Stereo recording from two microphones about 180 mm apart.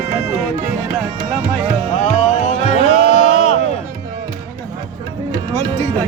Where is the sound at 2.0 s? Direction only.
45° left (ahead or behind).